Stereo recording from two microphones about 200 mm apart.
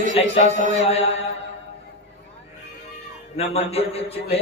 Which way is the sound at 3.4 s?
30° left (ahead or behind).